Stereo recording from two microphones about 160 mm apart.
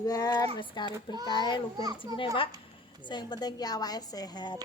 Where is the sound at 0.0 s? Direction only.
25° left (ahead or behind).